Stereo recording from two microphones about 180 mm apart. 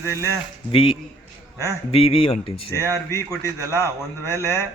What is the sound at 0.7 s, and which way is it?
Speech, 30° left (ahead or behind).